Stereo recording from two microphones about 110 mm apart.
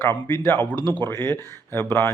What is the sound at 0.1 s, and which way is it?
Speech, 15° left (ahead or behind).